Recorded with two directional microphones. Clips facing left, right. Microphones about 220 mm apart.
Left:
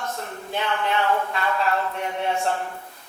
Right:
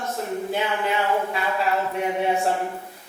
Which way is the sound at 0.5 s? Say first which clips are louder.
Left 2 dB; 10° right (ahead or behind).